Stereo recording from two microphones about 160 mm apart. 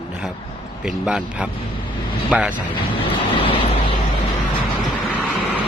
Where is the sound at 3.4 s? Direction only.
35° left (ahead or behind).